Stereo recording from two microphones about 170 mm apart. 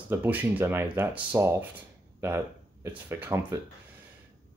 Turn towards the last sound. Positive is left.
turn(degrees=-15)  # may be behind; listen again after turning